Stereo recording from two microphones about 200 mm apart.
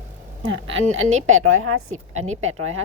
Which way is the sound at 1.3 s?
90° right.